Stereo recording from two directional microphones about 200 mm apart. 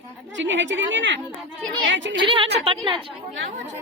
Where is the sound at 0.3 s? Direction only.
65° right (ahead or behind).